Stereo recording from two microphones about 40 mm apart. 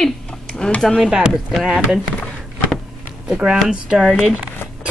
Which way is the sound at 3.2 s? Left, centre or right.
Right.